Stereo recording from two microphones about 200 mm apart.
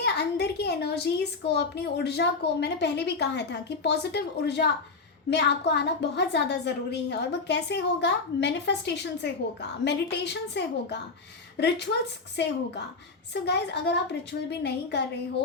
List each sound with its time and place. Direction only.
0.0 s a woman's voice: 55° left (ahead or behind)